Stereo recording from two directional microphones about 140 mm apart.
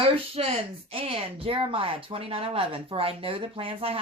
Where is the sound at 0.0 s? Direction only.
45° right (ahead or behind).